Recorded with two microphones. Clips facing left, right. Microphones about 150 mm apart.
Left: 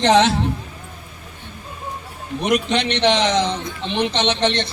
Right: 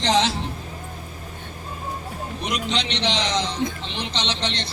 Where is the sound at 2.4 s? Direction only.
55° left (ahead or behind).